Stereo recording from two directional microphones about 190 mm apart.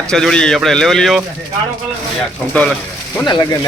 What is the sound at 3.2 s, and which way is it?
Speech, 25° left (ahead or behind).